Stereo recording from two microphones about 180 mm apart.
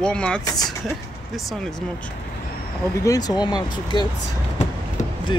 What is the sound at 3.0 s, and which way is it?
Speech, 20° left (ahead or behind).